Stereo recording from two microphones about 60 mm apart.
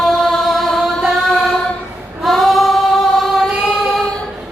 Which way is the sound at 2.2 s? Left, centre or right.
Centre.